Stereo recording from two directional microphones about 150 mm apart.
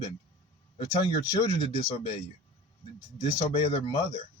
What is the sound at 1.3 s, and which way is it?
Speech, 25° left (ahead or behind).